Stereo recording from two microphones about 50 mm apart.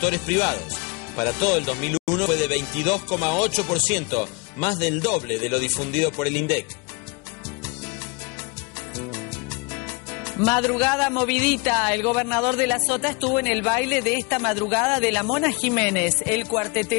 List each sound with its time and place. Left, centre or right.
0.0 s music: left
8.9 s music: left